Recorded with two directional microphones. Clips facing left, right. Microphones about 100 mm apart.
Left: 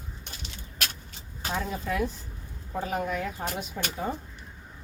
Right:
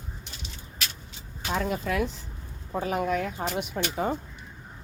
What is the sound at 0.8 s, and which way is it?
Vehicle, 55° left (ahead or behind).